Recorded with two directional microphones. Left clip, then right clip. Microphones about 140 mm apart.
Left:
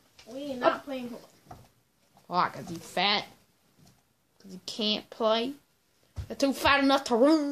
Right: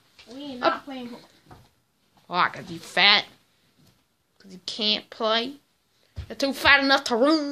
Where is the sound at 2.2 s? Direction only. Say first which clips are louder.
Right 4 dB; 5° left (ahead or behind).